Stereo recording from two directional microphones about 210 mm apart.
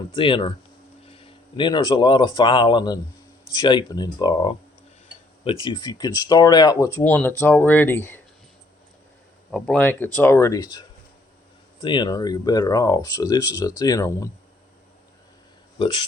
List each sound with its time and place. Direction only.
0.1 s speech: 25° left (ahead or behind)
9.5 s speech: 5° left (ahead or behind)